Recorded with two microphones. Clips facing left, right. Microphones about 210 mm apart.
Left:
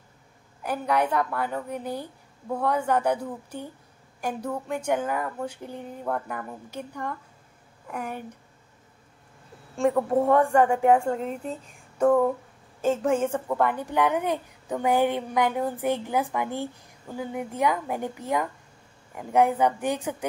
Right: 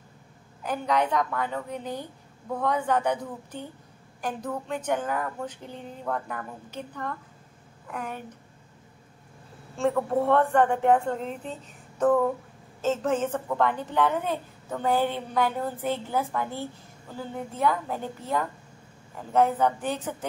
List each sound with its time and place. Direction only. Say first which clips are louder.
0.7 s a woman's voice: left 1 dB; 10° left (ahead or behind)
9.8 s a woman's voice: left 2 dB; 15° left (ahead or behind)